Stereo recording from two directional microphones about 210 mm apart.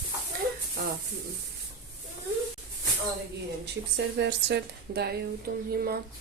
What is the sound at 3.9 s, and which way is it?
Speech, 55° right (ahead or behind).